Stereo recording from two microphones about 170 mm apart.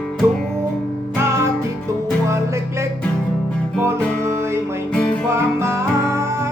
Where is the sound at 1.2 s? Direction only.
15° right (ahead or behind).